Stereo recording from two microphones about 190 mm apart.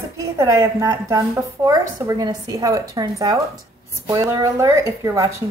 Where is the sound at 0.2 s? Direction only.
20° right (ahead or behind).